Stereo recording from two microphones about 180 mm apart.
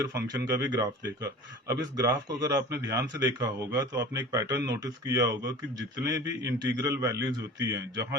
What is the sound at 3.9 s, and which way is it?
A man's voice, 20° right (ahead or behind).